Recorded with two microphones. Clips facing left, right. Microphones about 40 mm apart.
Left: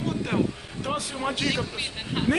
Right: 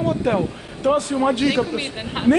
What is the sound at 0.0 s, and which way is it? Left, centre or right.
A man's voice, centre.